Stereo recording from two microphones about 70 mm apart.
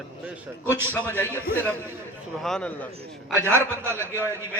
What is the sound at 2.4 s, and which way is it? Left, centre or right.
Speech, centre.